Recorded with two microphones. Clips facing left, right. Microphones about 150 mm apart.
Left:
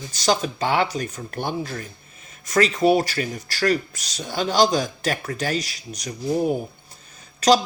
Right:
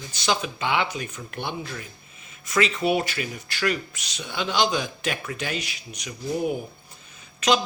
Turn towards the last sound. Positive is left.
turn(degrees=40)  # may be behind; listen again after turning